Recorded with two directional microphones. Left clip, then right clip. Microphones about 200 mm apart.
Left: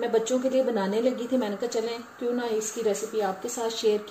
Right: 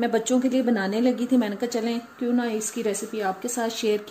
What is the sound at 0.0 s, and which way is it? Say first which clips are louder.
A woman's voice: right 1 dB; 60° right (ahead or behind).